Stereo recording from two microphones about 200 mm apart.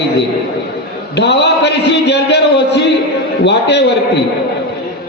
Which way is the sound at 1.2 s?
60° left (ahead or behind).